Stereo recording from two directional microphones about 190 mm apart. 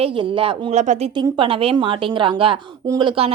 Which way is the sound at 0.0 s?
25° right (ahead or behind).